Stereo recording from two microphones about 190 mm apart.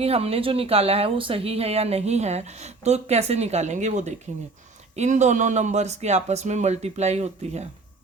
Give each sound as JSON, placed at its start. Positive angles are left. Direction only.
{"t": 0.0, "sound": "speech", "side_deg": -30}